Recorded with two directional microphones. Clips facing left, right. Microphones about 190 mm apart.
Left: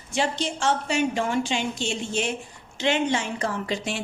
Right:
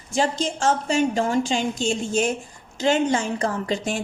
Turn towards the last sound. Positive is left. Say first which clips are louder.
# right 3 dB
turn(degrees=-45)  # may be behind; listen again after turning